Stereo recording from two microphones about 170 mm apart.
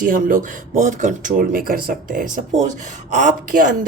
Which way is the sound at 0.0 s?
50° right (ahead or behind).